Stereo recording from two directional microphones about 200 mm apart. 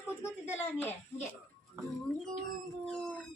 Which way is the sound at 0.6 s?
10° left (ahead or behind).